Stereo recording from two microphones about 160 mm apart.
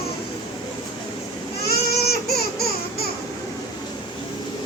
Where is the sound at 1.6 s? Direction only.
75° left (ahead or behind).